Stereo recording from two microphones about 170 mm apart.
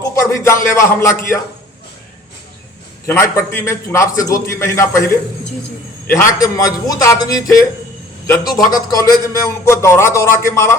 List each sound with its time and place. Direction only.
0.1 s speech: 15° left (ahead or behind)
3.1 s a man's voice: 15° left (ahead or behind)